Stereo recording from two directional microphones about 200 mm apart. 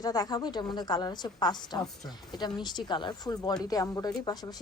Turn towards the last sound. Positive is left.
turn(degrees=20)  # may be behind; listen again after turning